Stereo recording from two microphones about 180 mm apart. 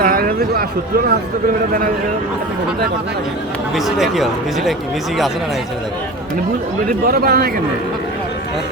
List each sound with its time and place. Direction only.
0.0 s a sound: 55° right (ahead or behind)
3.8 s speech: centre (ahead or behind)
7.0 s a man's voice: 55° right (ahead or behind)